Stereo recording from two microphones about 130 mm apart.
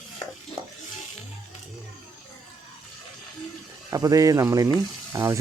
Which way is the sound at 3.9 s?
25° right (ahead or behind).